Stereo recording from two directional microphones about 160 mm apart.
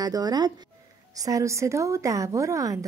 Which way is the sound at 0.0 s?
25° right (ahead or behind).